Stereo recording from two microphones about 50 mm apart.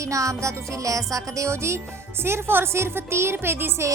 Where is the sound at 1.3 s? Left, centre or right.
Right.